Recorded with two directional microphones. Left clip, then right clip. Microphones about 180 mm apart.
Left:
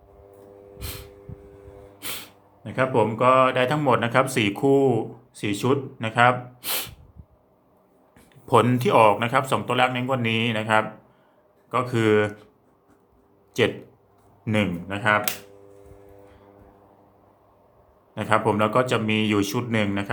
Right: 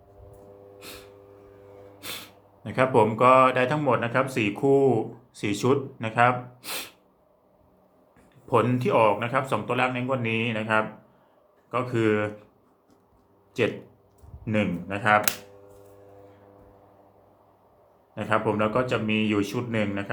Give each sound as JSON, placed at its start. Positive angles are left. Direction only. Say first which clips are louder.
{"t": 2.0, "sound": "sneeze", "louder": "left 2 dB", "side_deg": 15}
{"t": 2.6, "sound": "speech", "louder": "right 1 dB", "side_deg": -5}
{"t": 8.4, "sound": "speech", "louder": "left 4 dB", "side_deg": 30}
{"t": 14.4, "sound": "a man's voice", "louder": "left 2 dB", "side_deg": 25}
{"t": 14.8, "sound": "speech", "louder": "right 1 dB", "side_deg": 10}
{"t": 18.1, "sound": "speech", "louder": "left 3 dB", "side_deg": 25}